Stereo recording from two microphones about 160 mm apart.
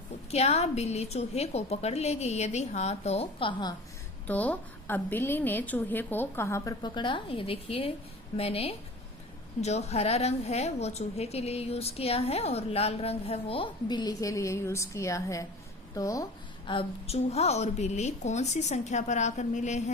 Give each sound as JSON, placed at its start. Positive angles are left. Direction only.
{"t": 0.3, "sound": "a woman's voice", "side_deg": 40}
{"t": 4.3, "sound": "a woman's voice", "side_deg": 10}
{"t": 16.6, "sound": "a woman's voice", "side_deg": 35}